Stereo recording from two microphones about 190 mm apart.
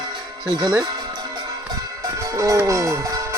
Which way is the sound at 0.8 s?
20° right (ahead or behind).